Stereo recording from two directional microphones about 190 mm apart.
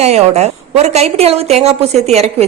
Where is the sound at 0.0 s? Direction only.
35° right (ahead or behind).